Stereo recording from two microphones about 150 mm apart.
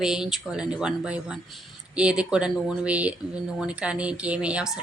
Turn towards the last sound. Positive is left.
turn(degrees=-5)  # may be behind; listen again after turning